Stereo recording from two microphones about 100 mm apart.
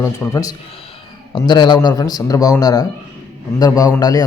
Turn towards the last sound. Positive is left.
turn(degrees=35)  # may be behind; listen again after turning